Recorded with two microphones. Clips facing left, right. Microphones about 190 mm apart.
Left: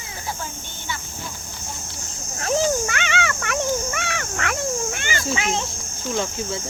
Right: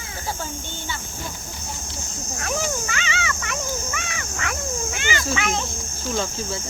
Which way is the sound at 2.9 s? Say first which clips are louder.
Left 3 dB; 60° left (ahead or behind).